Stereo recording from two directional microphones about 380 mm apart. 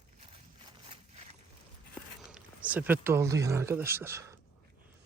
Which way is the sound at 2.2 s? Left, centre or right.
Centre.